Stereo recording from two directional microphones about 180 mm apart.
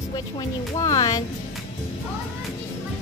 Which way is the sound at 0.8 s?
20° left (ahead or behind).